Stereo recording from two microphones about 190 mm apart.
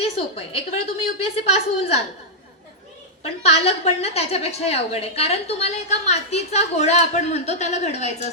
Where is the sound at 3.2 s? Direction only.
35° left (ahead or behind).